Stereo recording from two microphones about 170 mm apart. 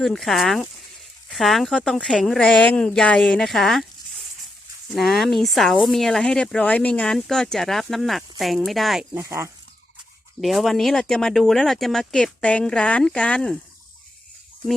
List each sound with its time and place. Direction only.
0.0 s speech: centre (ahead or behind)
4.9 s speech: centre (ahead or behind)
9.1 s speech: 15° right (ahead or behind)
10.4 s speech: centre (ahead or behind)